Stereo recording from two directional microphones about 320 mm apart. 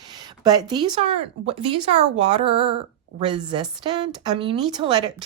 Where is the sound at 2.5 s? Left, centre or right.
Centre.